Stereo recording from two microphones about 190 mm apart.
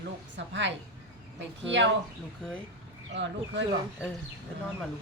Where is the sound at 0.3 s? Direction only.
70° right (ahead or behind).